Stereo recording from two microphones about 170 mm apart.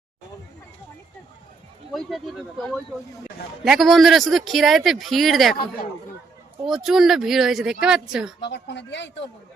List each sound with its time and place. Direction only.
1.9 s speech: centre (ahead or behind)
6.7 s speech: centre (ahead or behind)
8.4 s speech: 90° left